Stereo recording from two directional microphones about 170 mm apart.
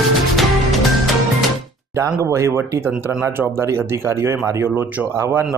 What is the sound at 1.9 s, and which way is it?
Speech, 15° right (ahead or behind).